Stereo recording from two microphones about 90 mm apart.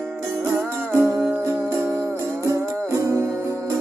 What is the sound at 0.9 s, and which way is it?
Music, 30° right (ahead or behind).